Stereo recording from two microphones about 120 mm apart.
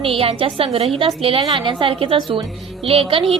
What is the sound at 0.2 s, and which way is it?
A woman's voice, 50° right (ahead or behind).